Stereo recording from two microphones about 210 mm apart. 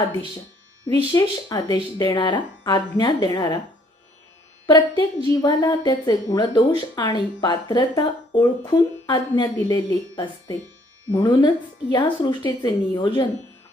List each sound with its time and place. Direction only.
0.9 s a woman's voice: 20° left (ahead or behind)
4.6 s a woman's voice: 20° left (ahead or behind)